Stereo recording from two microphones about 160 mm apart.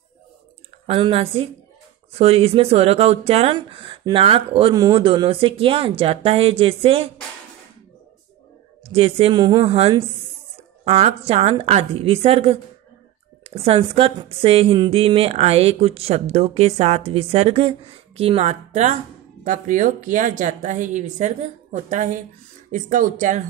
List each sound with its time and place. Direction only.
0.8 s a woman's voice: 35° right (ahead or behind)
8.8 s a woman's voice: 35° right (ahead or behind)
13.6 s a woman's voice: 35° right (ahead or behind); by 23.4 s 55° right (ahead or behind)